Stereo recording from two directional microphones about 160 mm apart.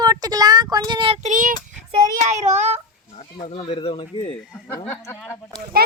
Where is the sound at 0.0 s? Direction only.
25° right (ahead or behind).